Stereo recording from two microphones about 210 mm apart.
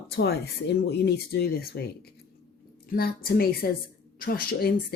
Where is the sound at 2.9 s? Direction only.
45° left (ahead or behind).